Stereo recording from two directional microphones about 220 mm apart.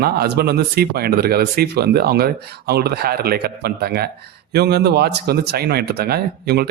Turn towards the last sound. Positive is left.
turn(degrees=-45)  # may be behind; listen again after turning